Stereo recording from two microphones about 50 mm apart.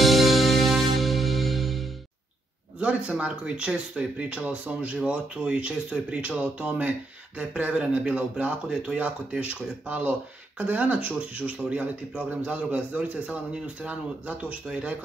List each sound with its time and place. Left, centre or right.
0.0 s music: centre
2.8 s speech: right